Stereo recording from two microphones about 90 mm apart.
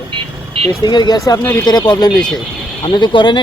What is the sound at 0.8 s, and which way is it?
Speech, 55° left (ahead or behind).